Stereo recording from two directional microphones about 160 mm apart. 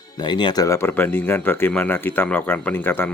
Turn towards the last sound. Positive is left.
turn(degrees=15)  # may be behind; listen again after turning